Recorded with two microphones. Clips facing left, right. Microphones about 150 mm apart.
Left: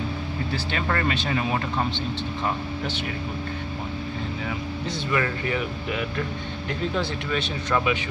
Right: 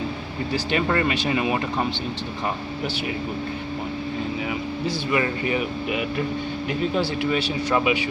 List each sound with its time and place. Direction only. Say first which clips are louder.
0.5 s speech: right 6 dB; 15° right (ahead or behind)
4.8 s speech: right 2 dB; 15° right (ahead or behind)